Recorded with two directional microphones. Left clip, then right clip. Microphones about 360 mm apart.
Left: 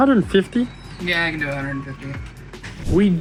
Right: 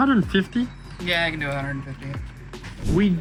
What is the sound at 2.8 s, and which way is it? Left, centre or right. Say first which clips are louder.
Speech: left 4 dB; centre.